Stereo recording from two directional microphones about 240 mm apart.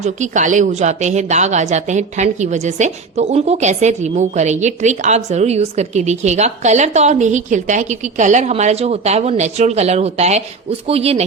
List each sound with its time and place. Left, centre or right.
0.0 s a woman's voice: right